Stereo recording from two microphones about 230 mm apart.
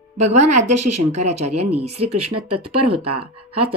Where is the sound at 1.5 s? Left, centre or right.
Right.